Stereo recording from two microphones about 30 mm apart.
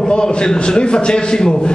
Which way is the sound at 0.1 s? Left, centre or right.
Left.